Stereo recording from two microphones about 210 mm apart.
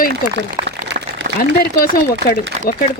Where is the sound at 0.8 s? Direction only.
55° right (ahead or behind).